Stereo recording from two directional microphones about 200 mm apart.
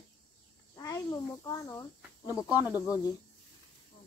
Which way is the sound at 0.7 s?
20° left (ahead or behind).